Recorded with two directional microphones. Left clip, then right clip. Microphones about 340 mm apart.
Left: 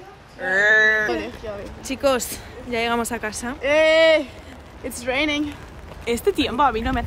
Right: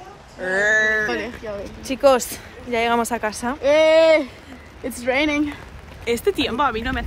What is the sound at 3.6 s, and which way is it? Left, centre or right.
Speech, right.